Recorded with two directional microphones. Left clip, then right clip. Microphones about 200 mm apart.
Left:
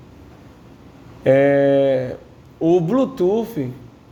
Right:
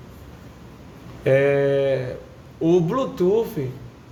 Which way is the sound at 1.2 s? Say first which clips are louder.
Left 4 dB; 40° left (ahead or behind).